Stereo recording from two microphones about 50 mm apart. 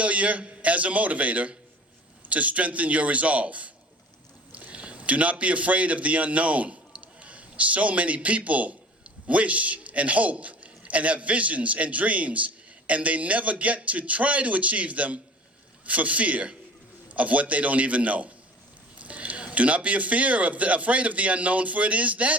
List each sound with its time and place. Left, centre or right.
0.0 s a man's voice: right